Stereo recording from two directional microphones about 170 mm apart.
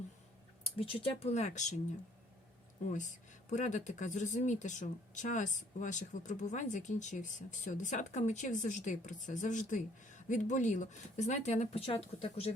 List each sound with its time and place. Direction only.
0.6 s speech: 35° left (ahead or behind)
2.8 s speech: 45° left (ahead or behind)